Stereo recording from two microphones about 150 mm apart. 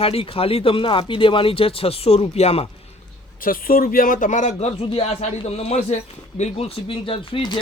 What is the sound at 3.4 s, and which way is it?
A man's voice, 70° left (ahead or behind).